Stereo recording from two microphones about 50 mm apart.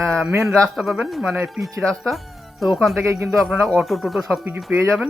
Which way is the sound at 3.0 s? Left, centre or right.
Right.